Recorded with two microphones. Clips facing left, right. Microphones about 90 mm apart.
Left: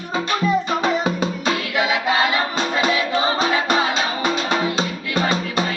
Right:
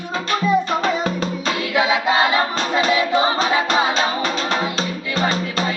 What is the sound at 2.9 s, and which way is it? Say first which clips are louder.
A capella: right 2 dB; 20° right (ahead or behind).